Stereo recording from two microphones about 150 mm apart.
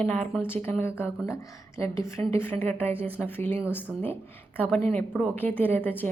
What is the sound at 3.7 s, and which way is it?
A woman's voice, 15° left (ahead or behind).